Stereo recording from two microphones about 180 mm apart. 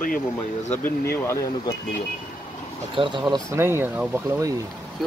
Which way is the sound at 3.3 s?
15° right (ahead or behind).